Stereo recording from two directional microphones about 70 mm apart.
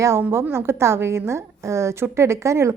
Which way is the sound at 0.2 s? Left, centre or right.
Right.